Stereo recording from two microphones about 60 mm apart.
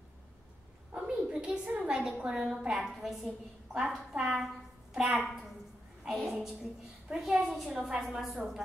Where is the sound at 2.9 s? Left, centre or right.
Centre.